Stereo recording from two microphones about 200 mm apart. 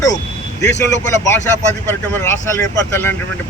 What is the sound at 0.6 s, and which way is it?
Speech, 60° left (ahead or behind).